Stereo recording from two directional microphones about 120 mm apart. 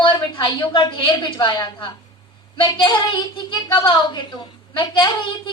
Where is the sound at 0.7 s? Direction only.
45° left (ahead or behind).